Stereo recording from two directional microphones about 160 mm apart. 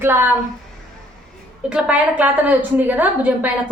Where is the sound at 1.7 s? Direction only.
10° right (ahead or behind).